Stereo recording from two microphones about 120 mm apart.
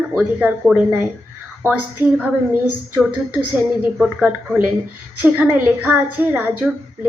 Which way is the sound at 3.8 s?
15° right (ahead or behind).